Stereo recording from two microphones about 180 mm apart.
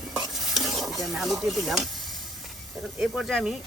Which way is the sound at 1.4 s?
Centre (ahead or behind).